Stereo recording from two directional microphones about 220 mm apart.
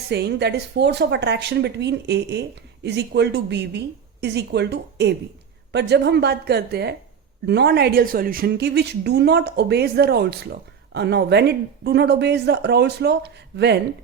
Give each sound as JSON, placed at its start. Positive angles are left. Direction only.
{"t": 0.1, "sound": "speech", "side_deg": -50}